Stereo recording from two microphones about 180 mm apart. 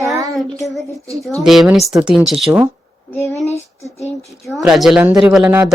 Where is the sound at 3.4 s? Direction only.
35° left (ahead or behind).